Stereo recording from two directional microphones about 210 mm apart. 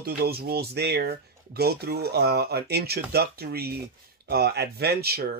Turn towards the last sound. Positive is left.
turn(degrees=-50)  # may be behind; listen again after turning